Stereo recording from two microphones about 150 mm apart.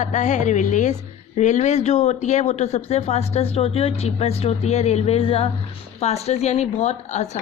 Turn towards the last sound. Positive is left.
turn(degrees=50)  # may be behind; listen again after turning